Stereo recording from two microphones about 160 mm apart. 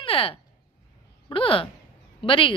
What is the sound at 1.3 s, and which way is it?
A man's voice, 35° left (ahead or behind).